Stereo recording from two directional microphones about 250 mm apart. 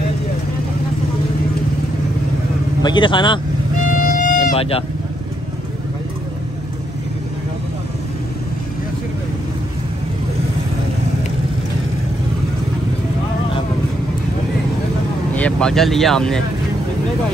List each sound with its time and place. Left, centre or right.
2.8 s speech: centre
3.7 s music: left
15.3 s speech: centre